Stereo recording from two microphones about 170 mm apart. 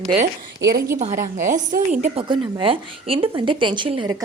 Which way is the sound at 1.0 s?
50° right (ahead or behind).